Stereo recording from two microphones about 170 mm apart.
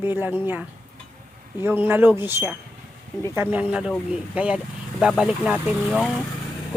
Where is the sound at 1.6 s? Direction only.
10° right (ahead or behind).